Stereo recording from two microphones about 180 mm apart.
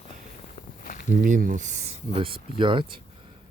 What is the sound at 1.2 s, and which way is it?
Speech, 50° right (ahead or behind).